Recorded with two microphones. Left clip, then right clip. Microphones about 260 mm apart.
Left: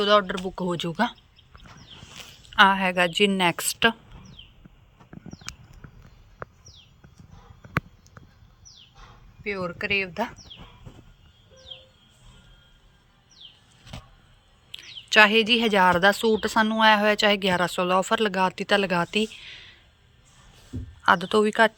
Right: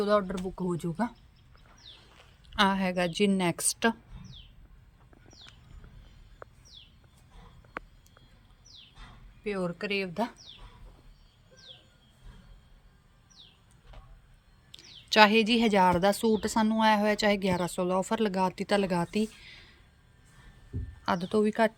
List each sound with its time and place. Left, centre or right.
0.0 s speech: centre
0.4 s speech: centre
2.4 s a woman's voice: centre
9.4 s speech: centre
14.8 s speech: centre
21.0 s speech: centre